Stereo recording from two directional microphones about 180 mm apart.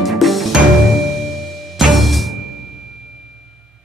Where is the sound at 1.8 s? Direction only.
Centre (ahead or behind).